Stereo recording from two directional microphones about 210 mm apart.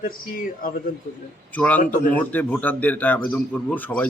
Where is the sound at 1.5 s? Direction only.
5° left (ahead or behind).